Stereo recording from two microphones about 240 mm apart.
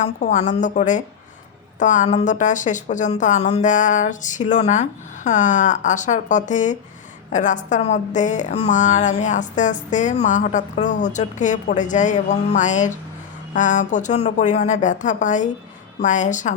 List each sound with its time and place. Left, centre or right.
0.0 s a woman's voice: left